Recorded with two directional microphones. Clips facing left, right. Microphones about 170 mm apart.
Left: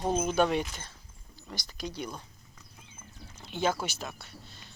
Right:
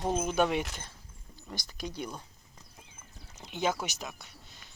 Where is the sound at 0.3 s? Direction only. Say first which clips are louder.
Left 1 dB; 15° right (ahead or behind).